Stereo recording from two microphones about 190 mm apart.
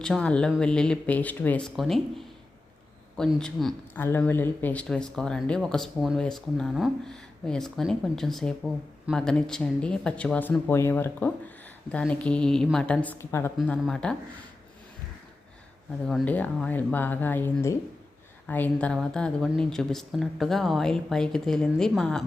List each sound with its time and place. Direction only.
0.0 s speech: 5° left (ahead or behind)
16.0 s speech: 5° left (ahead or behind)